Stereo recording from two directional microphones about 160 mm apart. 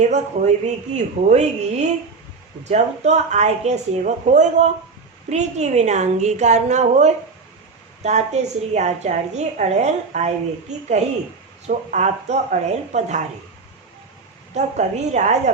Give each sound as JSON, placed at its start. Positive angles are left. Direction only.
{"t": 0.9, "sound": "a woman's voice", "side_deg": -45}
{"t": 14.5, "sound": "a woman's voice", "side_deg": -45}